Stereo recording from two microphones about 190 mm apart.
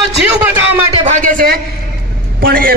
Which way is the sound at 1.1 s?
45° right (ahead or behind).